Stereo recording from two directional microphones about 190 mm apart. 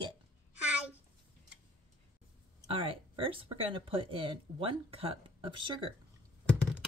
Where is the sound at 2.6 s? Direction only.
30° right (ahead or behind).